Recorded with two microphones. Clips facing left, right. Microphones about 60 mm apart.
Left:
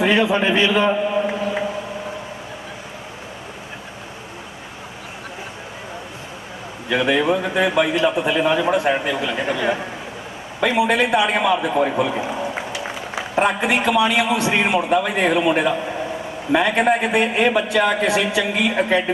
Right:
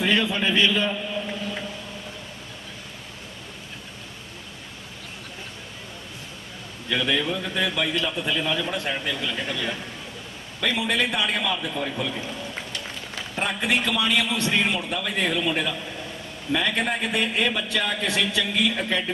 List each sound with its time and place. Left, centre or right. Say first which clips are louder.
0.0 s a man's voice: left 6 dB; left
6.8 s a man's voice: left 7 dB; left